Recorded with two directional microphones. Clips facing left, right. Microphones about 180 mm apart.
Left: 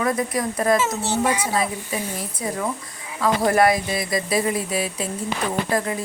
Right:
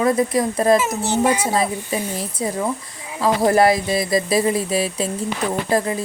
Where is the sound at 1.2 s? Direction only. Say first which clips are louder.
Right 3 dB; 30° right (ahead or behind).